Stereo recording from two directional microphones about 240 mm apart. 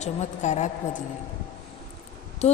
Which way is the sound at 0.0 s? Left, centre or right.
Left.